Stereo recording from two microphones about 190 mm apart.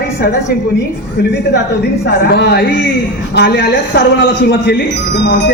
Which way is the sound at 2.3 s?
60° left (ahead or behind).